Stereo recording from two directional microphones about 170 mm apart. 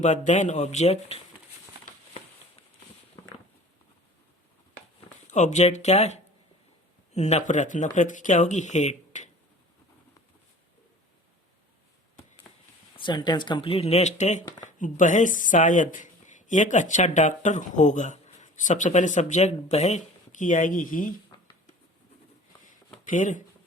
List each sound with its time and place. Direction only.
0.0 s speech: 45° left (ahead or behind)
1.8 s a sound: 40° left (ahead or behind)
5.3 s speech: 45° left (ahead or behind)
13.0 s speech: 25° left (ahead or behind); by 21.1 s 50° left (ahead or behind)
23.0 s speech: 50° left (ahead or behind)